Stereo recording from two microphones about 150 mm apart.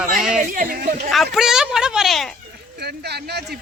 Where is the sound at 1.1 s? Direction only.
Centre (ahead or behind).